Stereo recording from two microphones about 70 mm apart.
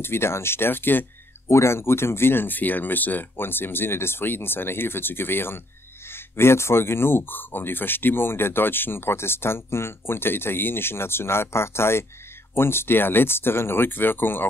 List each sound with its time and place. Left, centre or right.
0.0 s speech: left
1.5 s speech: left